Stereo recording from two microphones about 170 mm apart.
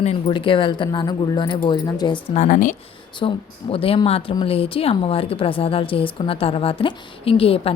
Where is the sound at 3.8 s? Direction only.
35° left (ahead or behind).